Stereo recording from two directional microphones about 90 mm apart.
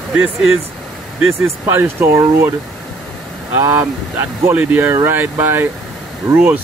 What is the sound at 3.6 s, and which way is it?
Speech, 40° right (ahead or behind).